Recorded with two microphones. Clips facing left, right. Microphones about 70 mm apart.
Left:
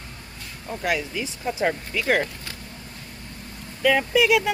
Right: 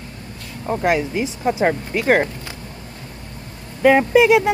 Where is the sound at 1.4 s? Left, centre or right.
Right.